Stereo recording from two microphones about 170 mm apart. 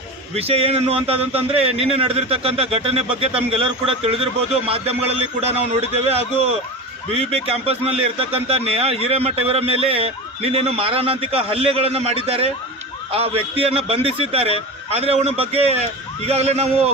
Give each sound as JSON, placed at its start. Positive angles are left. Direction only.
{"t": 0.3, "sound": "a man's voice", "side_deg": -35}